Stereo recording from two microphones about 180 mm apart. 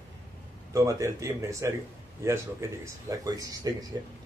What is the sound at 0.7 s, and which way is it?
Speech, 20° right (ahead or behind).